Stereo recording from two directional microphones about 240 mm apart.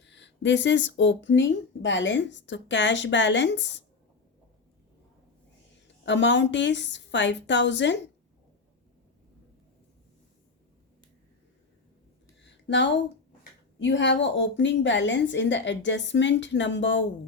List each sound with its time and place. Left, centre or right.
0.0 s speech: left
6.1 s speech: left
12.4 s a sound: left
13.7 s speech: left